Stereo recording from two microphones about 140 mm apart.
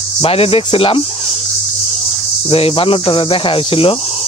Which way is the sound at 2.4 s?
40° left (ahead or behind).